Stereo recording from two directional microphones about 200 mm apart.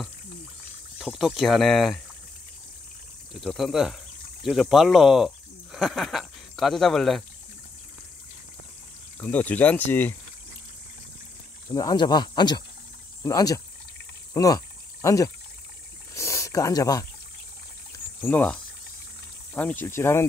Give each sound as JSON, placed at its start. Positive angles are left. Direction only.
{"t": 0.9, "sound": "speech", "side_deg": 0}
{"t": 3.3, "sound": "speech", "side_deg": 0}
{"t": 9.2, "sound": "speech", "side_deg": 10}
{"t": 11.7, "sound": "speech", "side_deg": 20}
{"t": 14.3, "sound": "pour", "side_deg": 15}
{"t": 16.2, "sound": "speech", "side_deg": 15}
{"t": 17.9, "sound": "pour", "side_deg": 10}
{"t": 19.5, "sound": "speech", "side_deg": 10}